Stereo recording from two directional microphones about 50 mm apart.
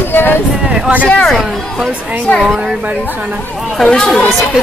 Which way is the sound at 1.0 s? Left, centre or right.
Left.